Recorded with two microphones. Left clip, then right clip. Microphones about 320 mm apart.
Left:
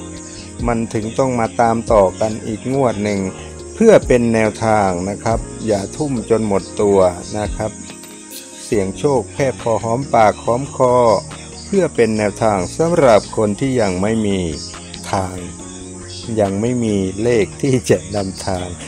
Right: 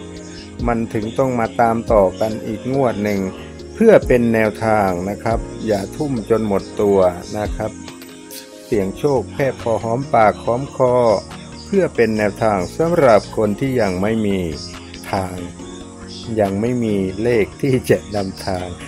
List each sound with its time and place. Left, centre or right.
0.7 s speech: right
15.0 s music: right
16.3 s speech: right